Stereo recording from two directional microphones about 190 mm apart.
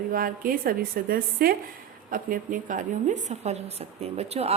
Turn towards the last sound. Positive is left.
turn(degrees=-35)  # may be behind; listen again after turning